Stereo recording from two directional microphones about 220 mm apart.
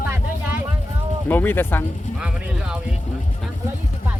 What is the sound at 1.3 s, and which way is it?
Speech, 10° left (ahead or behind).